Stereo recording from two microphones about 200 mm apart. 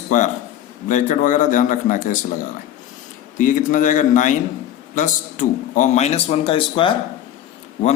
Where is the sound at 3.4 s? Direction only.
40° left (ahead or behind).